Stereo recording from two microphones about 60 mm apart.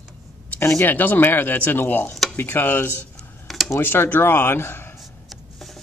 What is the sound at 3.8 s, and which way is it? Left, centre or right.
Speech, left.